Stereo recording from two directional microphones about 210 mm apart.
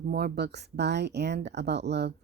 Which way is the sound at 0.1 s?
45° right (ahead or behind).